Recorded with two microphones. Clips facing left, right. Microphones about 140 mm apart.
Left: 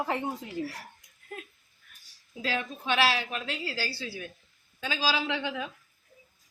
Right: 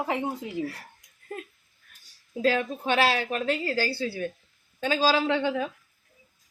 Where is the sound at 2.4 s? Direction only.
45° right (ahead or behind).